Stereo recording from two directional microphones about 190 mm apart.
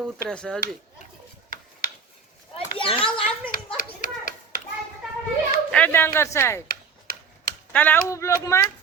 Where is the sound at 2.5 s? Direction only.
25° left (ahead or behind).